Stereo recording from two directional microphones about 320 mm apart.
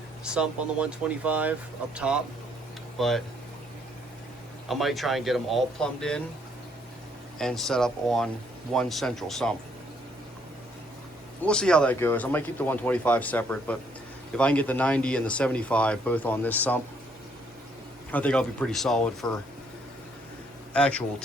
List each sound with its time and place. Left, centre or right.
0.3 s speech: centre
4.7 s speech: centre
7.3 s speech: centre
11.4 s speech: centre
18.1 s speech: centre
20.7 s speech: centre